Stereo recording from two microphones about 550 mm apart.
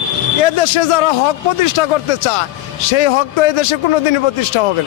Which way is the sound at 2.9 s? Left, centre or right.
Left.